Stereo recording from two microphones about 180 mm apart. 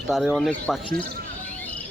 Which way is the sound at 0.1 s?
Centre (ahead or behind).